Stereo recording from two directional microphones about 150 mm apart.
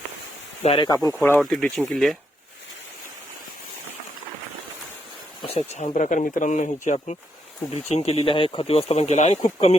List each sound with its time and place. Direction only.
0.6 s speech: 40° left (ahead or behind)
0.9 s speech: 25° left (ahead or behind)
1.4 s speech: 5° left (ahead or behind)
5.4 s speech: 40° left (ahead or behind)